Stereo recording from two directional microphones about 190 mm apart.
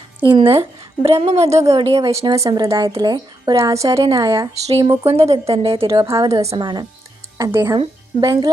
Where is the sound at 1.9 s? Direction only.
15° right (ahead or behind).